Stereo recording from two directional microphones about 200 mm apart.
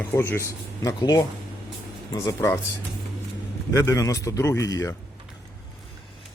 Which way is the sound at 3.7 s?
15° left (ahead or behind).